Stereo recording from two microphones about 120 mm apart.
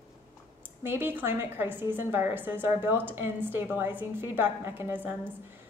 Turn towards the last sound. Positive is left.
turn(degrees=-15)  # may be behind; listen again after turning